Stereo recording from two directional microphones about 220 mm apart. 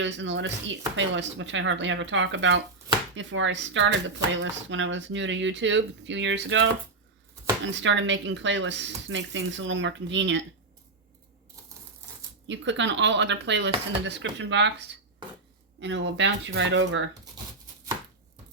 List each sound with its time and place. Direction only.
0.0 s speech: 55° right (ahead or behind)
12.5 s speech: 55° right (ahead or behind)